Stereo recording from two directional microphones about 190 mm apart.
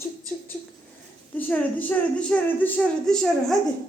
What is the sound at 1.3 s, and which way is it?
A woman's voice, 10° left (ahead or behind).